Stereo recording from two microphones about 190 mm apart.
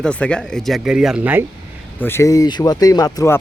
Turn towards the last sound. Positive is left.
turn(degrees=15)  # may be behind; listen again after turning